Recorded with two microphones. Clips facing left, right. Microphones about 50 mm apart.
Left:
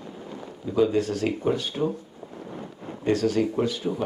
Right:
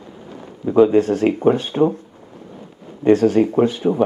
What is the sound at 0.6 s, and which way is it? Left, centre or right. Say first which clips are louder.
Speech: right 9 dB; right.